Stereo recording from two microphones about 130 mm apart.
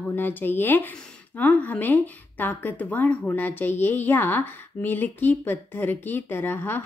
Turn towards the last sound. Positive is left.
turn(degrees=15)  # may be behind; listen again after turning